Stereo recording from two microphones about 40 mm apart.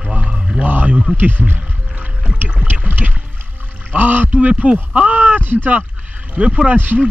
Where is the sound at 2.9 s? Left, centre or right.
Right.